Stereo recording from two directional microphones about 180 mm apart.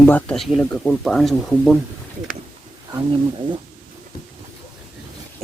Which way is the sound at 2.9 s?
25° right (ahead or behind).